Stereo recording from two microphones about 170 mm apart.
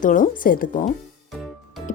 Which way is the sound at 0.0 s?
50° left (ahead or behind).